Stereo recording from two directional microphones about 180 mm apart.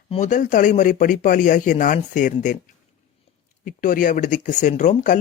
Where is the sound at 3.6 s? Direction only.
50° left (ahead or behind).